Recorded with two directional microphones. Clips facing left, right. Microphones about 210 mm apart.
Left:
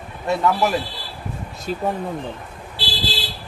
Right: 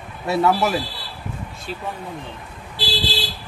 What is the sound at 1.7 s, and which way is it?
Speech, 45° left (ahead or behind).